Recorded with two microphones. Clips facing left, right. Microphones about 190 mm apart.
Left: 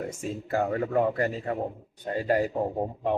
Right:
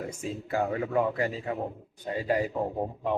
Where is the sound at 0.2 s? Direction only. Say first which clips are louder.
Left 1 dB; 50° left (ahead or behind).